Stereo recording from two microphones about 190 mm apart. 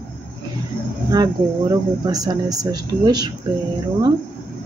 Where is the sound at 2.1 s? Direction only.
20° right (ahead or behind).